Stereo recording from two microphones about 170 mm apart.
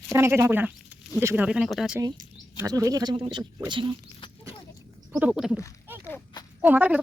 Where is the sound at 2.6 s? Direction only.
20° right (ahead or behind).